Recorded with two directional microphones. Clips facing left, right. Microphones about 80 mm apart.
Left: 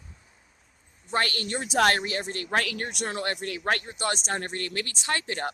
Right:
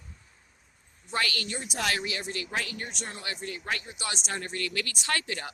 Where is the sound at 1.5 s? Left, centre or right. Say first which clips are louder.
Left 14 dB; left.